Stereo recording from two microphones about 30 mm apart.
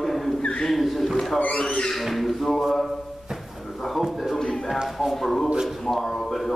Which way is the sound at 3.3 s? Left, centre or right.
Centre.